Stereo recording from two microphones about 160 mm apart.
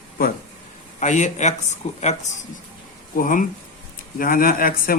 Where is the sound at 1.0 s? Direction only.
50° left (ahead or behind).